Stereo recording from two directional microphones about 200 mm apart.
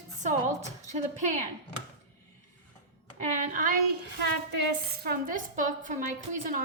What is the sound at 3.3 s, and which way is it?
Speech, 40° right (ahead or behind).